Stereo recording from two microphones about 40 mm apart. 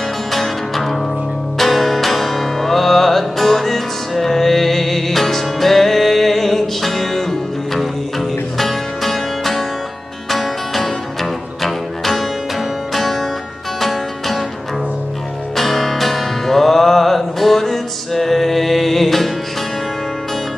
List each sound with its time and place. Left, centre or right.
0.3 s music: centre
15.5 s music: centre